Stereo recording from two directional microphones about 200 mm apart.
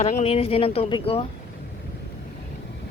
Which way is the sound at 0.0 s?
35° left (ahead or behind).